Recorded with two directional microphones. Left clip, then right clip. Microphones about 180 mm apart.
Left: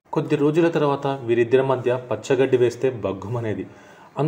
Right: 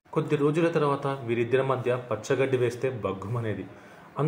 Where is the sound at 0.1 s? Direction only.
30° left (ahead or behind).